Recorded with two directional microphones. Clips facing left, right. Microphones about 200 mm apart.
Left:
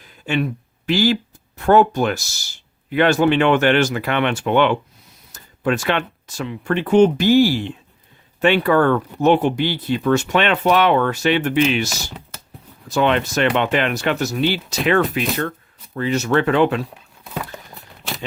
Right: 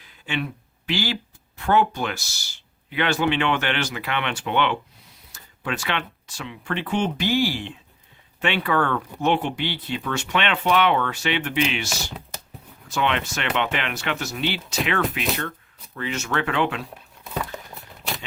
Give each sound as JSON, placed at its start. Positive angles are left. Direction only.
{"t": 0.3, "sound": "speech", "side_deg": 45}
{"t": 12.9, "sound": "speech", "side_deg": 40}
{"t": 16.9, "sound": "a sound", "side_deg": 0}